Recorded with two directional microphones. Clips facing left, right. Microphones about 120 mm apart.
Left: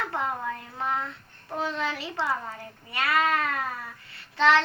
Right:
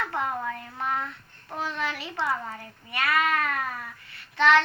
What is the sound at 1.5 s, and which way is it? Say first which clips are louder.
A child's voice: left 2 dB; 25° left (ahead or behind).